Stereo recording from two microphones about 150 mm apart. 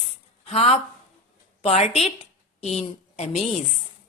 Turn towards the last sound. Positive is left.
turn(degrees=45)  # may be behind; listen again after turning